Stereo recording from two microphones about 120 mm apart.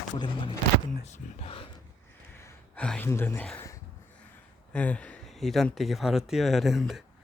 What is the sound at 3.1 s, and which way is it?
Speech, 20° left (ahead or behind).